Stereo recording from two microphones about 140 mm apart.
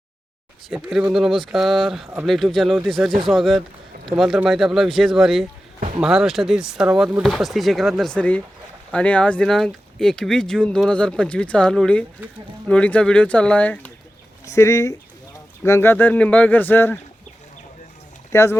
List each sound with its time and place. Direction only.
0.7 s speech: centre (ahead or behind)
14.5 s speech: 20° left (ahead or behind)
18.3 s speech: 20° left (ahead or behind)